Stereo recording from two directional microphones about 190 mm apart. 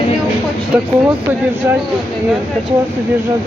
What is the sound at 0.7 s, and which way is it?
Speech, 5° right (ahead or behind).